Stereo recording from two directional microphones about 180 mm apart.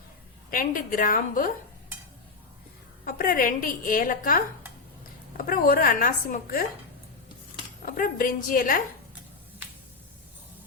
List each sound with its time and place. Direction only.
0.5 s a woman's voice: 50° left (ahead or behind)
3.0 s a woman's voice: 50° left (ahead or behind)
7.9 s a woman's voice: 50° left (ahead or behind)